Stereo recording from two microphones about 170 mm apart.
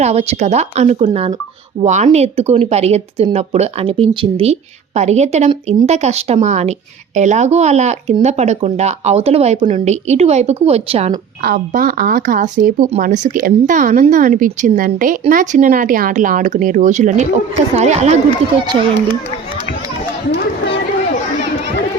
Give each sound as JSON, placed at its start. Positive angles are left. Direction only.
{"t": 0.0, "sound": "speech", "side_deg": -40}
{"t": 11.4, "sound": "speech", "side_deg": -60}